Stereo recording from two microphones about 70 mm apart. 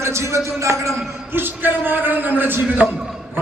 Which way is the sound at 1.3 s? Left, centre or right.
Right.